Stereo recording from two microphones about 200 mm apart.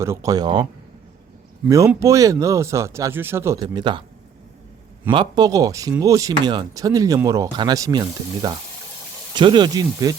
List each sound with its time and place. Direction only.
0.0 s speech: 15° right (ahead or behind)
5.1 s speech: 20° right (ahead or behind)